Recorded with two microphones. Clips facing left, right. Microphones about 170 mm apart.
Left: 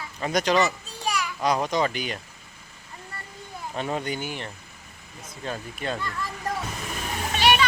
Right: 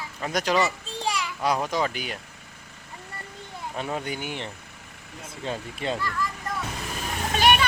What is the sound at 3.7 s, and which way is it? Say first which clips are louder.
Speech: left 2 dB; 5° right (ahead or behind).